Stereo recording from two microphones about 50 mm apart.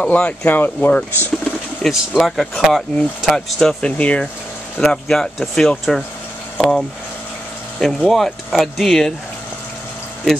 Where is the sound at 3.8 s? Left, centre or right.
Left.